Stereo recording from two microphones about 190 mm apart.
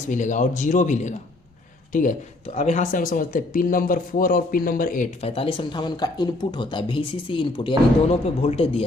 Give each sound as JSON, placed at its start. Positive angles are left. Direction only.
{"t": 0.1, "sound": "a man's voice", "side_deg": 40}
{"t": 5.2, "sound": "speech", "side_deg": 30}